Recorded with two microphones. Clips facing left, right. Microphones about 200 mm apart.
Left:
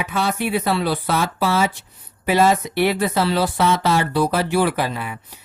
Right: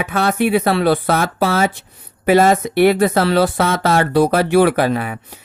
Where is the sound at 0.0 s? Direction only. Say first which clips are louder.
Right 5 dB; 55° right (ahead or behind).